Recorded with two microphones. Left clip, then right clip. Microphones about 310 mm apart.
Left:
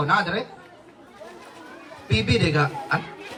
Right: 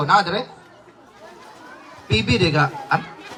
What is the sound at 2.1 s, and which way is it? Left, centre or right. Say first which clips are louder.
Speech: right 3 dB; right.